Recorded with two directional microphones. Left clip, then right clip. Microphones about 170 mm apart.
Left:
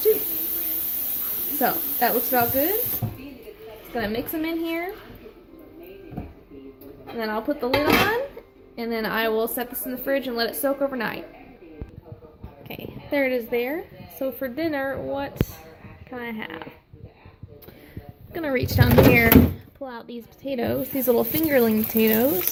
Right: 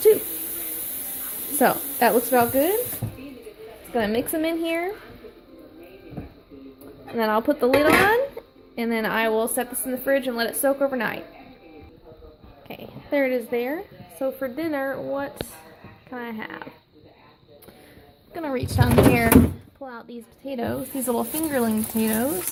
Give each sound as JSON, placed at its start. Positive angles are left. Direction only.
{"t": 1.5, "sound": "speech", "side_deg": -50}
{"t": 3.9, "sound": "speech", "side_deg": -45}
{"t": 7.2, "sound": "speech", "side_deg": -50}
{"t": 8.7, "sound": "a woman's voice", "side_deg": -45}
{"t": 9.0, "sound": "speech", "side_deg": -30}
{"t": 12.6, "sound": "a woman's voice", "side_deg": -5}
{"t": 18.3, "sound": "speech", "side_deg": 5}